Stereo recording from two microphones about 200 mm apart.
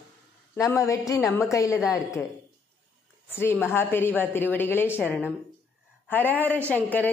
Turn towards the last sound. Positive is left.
turn(degrees=10)  # may be behind; listen again after turning